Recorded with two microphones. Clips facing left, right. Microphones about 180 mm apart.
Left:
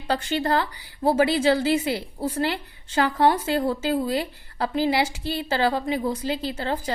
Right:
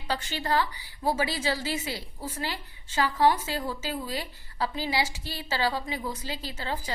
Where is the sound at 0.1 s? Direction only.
55° left (ahead or behind).